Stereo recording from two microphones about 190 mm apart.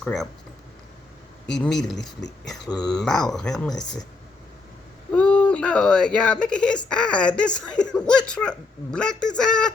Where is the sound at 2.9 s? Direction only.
5° left (ahead or behind).